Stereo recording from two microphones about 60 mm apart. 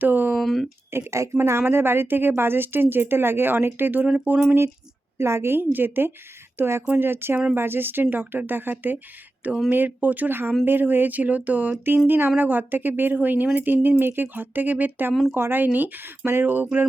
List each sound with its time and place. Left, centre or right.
0.0 s speech: right
0.3 s speech: centre
0.9 s a woman's voice: right
5.1 s a woman's voice: right
6.6 s a woman's voice: right
15.1 s speech: centre
15.4 s a woman's voice: right